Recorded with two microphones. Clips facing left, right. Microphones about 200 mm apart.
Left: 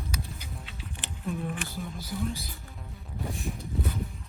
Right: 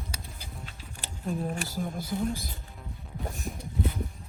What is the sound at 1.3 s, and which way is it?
Speech, 30° right (ahead or behind).